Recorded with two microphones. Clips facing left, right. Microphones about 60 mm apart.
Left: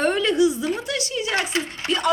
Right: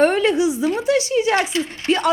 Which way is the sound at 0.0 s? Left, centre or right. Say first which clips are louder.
Right 3 dB; right.